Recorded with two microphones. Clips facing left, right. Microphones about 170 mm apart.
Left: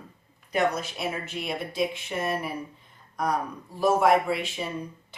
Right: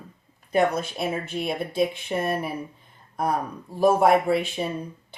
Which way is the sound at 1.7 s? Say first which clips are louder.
Right 4 dB; 55° right (ahead or behind).